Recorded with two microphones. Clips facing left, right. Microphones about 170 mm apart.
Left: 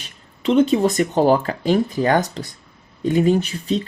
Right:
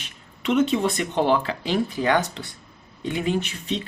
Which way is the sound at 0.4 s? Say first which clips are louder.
Left 5 dB; 35° left (ahead or behind).